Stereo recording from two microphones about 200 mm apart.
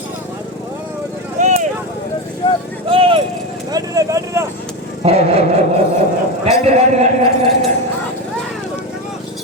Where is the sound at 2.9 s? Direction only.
25° right (ahead or behind).